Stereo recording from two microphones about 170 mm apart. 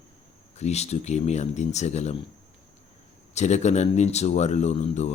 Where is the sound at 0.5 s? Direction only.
40° left (ahead or behind).